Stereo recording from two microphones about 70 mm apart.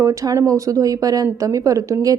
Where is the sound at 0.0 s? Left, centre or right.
Right.